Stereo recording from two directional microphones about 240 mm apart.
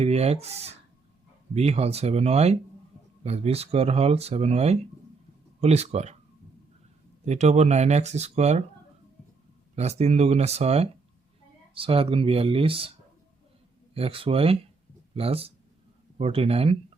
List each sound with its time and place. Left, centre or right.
0.0 s speech: right
7.3 s speech: right
9.7 s speech: right
13.9 s speech: right